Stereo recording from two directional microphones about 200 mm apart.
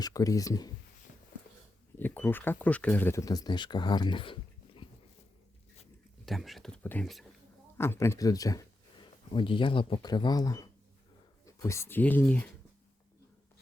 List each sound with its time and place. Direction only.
0.0 s speech: 15° left (ahead or behind)
2.0 s speech: 10° left (ahead or behind); by 4.9 s 25° left (ahead or behind)
6.2 s speech: centre (ahead or behind)
7.8 s speech: 15° left (ahead or behind)